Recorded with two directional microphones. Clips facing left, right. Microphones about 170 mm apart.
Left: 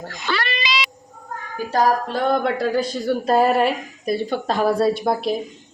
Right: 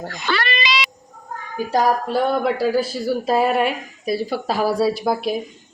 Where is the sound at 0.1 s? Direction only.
65° right (ahead or behind).